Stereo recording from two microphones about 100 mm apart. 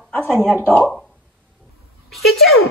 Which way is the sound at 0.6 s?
25° left (ahead or behind).